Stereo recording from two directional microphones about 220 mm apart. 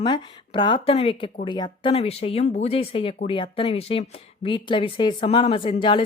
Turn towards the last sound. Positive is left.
turn(degrees=20)  # may be behind; listen again after turning